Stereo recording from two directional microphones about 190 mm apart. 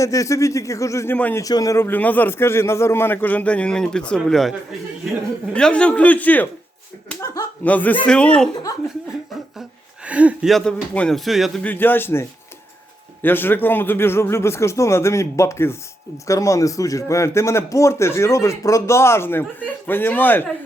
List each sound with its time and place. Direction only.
0.0 s speech: 15° left (ahead or behind)
5.5 s speech: 5° left (ahead or behind)
9.6 s speech: 5° right (ahead or behind); by 12.2 s 10° left (ahead or behind)
13.2 s speech: 10° left (ahead or behind)